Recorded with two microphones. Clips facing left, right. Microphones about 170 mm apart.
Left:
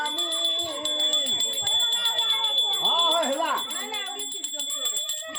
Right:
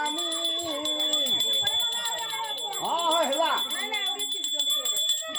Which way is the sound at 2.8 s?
45° right (ahead or behind).